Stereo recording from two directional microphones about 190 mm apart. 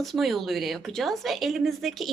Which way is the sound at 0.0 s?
Centre (ahead or behind).